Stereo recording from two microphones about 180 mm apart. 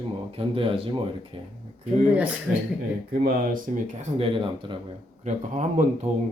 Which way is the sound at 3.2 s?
55° right (ahead or behind).